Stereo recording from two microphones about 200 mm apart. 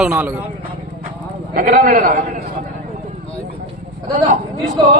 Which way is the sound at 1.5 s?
45° right (ahead or behind).